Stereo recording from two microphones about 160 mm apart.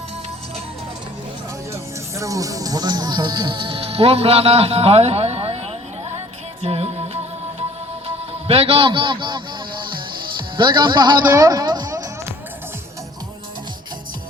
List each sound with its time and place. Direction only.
1.7 s music: 20° right (ahead or behind); by 5.5 s 40° right (ahead or behind)
6.6 s music: 40° right (ahead or behind)
8.0 s a man's voice: 35° right (ahead or behind)
10.6 s speech: 30° right (ahead or behind)
11.3 s music: 20° right (ahead or behind)